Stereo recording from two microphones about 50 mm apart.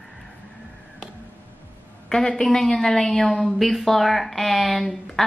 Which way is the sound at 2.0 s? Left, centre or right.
Centre.